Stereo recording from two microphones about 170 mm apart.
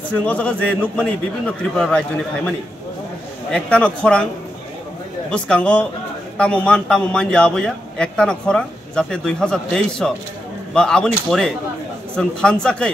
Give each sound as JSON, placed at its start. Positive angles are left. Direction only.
{"t": 0.2, "sound": "a man's voice", "side_deg": 10}
{"t": 3.5, "sound": "a man's voice", "side_deg": 5}
{"t": 5.3, "sound": "a man's voice", "side_deg": 5}